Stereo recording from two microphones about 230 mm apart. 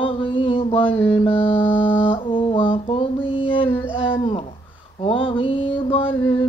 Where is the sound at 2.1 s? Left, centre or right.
Left.